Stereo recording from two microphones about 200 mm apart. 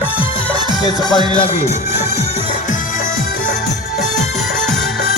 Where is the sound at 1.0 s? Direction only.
20° left (ahead or behind).